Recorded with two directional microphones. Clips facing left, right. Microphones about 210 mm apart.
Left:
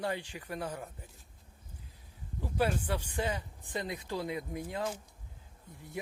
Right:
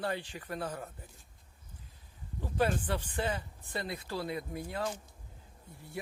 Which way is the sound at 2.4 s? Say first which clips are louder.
Right 1 dB; 10° left (ahead or behind).